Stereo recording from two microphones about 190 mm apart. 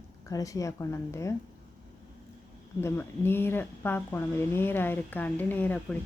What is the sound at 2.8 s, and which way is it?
Speech, 15° left (ahead or behind).